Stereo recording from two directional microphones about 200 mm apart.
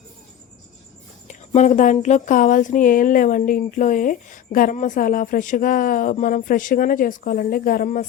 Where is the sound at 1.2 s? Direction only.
35° left (ahead or behind).